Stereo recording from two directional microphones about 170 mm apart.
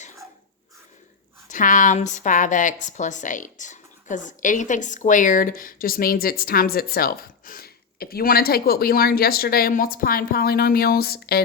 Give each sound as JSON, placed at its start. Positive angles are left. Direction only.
{"t": 1.5, "sound": "a woman's voice", "side_deg": 50}